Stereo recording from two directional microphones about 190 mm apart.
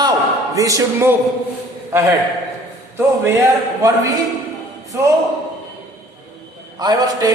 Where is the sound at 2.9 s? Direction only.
10° right (ahead or behind).